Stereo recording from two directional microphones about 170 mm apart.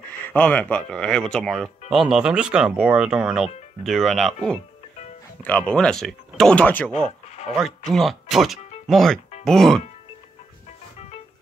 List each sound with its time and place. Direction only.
0.1 s speech: 10° left (ahead or behind)
7.1 s a sound: 40° left (ahead or behind)
7.5 s speech: centre (ahead or behind)